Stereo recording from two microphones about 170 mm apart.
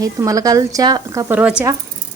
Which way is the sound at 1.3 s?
5° right (ahead or behind).